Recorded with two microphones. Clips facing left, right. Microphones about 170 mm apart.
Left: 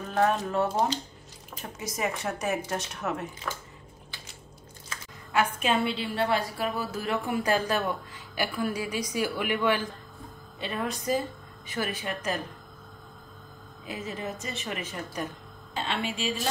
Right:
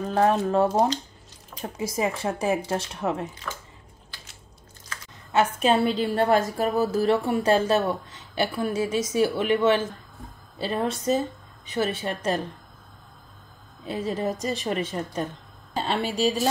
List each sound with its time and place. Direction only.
0.1 s speech: 35° right (ahead or behind)
5.3 s a woman's voice: 35° right (ahead or behind)
10.6 s a woman's voice: 35° right (ahead or behind)
13.8 s a woman's voice: 30° right (ahead or behind)